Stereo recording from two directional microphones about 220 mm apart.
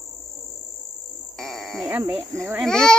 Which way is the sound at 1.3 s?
Centre (ahead or behind).